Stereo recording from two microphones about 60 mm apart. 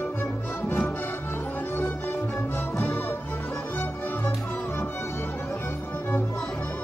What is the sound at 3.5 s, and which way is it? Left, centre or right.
Music, left.